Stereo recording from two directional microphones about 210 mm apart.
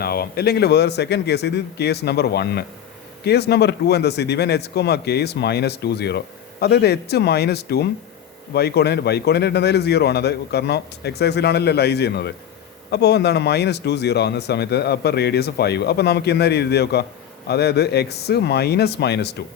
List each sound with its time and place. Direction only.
0.0 s speech: 50° left (ahead or behind)